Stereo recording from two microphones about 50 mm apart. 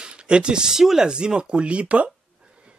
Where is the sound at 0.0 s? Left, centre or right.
Centre.